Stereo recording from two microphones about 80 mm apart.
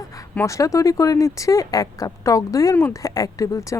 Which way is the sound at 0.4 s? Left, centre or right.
Left.